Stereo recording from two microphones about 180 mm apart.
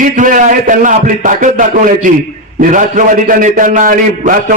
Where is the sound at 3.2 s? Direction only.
45° right (ahead or behind).